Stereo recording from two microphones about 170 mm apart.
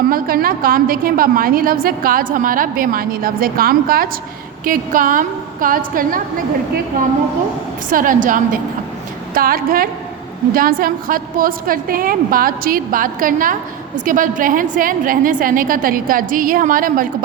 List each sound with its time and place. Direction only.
0.1 s a woman's voice: 60° right (ahead or behind)
7.9 s a woman's voice: 50° right (ahead or behind)